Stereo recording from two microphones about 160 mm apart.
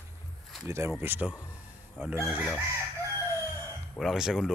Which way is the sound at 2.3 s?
10° right (ahead or behind).